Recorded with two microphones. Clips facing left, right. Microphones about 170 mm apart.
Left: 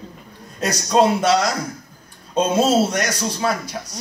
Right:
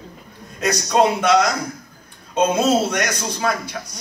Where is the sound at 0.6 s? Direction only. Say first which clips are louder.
Even; 35° left (ahead or behind).